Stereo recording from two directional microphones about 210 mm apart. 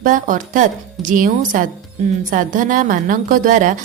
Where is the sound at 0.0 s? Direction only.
40° right (ahead or behind).